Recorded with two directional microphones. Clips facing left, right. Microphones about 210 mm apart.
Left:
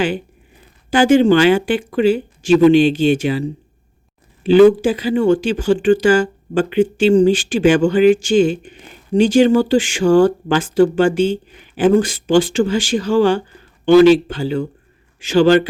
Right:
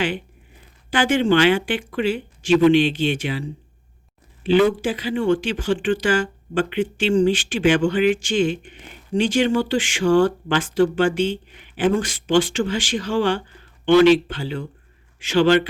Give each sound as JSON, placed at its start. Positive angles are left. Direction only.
{"t": 0.9, "sound": "speech", "side_deg": 45}
{"t": 4.4, "sound": "speech", "side_deg": 45}